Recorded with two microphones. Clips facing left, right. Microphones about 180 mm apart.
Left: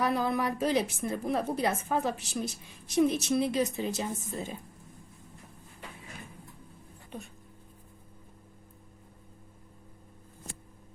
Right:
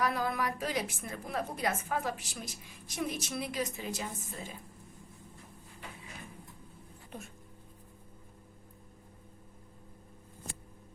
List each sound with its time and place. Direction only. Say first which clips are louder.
0.0 s a woman's voice: left 4 dB; 25° left (ahead or behind)